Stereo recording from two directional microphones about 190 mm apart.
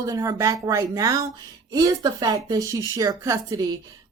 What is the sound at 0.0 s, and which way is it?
Speech, 15° right (ahead or behind).